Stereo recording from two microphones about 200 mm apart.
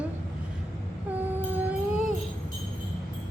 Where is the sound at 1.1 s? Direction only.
10° right (ahead or behind).